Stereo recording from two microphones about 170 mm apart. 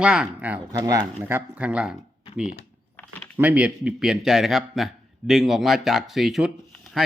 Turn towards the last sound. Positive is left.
turn(degrees=0)  # may be behind; listen again after turning